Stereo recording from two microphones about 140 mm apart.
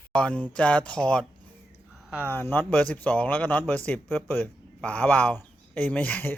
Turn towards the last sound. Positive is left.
turn(degrees=15)  # may be behind; listen again after turning